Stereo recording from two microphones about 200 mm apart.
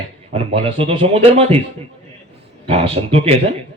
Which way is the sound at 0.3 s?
30° right (ahead or behind).